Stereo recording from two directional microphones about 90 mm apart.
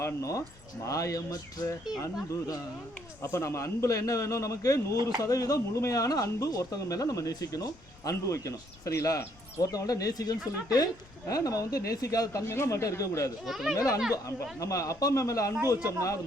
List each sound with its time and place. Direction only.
0.0 s a man's voice: 35° left (ahead or behind)
3.2 s a man's voice: 30° left (ahead or behind)
13.4 s speech: centre (ahead or behind)
13.7 s a man's voice: 40° left (ahead or behind)